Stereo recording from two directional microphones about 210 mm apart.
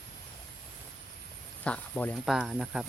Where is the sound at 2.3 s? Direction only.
5° right (ahead or behind).